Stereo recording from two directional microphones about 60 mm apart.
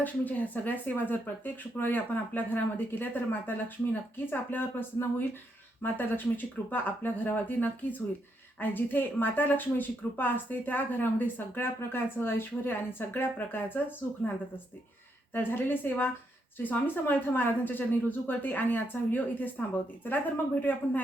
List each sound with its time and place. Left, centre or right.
0.0 s speech: left
15.3 s speech: left